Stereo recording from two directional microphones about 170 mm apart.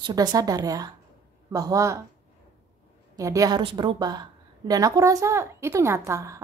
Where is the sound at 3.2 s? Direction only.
20° right (ahead or behind).